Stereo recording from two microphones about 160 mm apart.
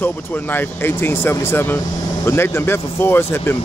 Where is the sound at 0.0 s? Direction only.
10° left (ahead or behind).